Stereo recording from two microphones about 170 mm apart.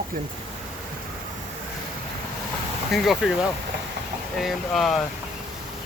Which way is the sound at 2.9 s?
Centre (ahead or behind).